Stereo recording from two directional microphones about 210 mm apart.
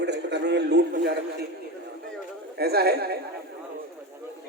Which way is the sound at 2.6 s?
50° right (ahead or behind).